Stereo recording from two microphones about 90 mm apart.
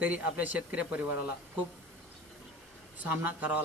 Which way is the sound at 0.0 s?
15° right (ahead or behind).